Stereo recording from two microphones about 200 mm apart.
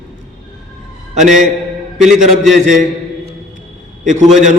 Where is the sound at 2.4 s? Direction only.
Centre (ahead or behind).